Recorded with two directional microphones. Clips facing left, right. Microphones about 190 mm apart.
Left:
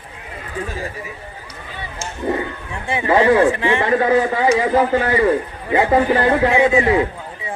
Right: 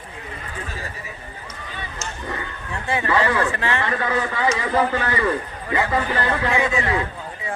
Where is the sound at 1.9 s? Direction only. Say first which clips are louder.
Left 10 dB; 25° left (ahead or behind).